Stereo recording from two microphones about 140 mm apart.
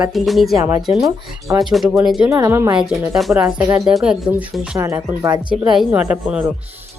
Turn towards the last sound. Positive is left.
turn(degrees=-10)  # may be behind; listen again after turning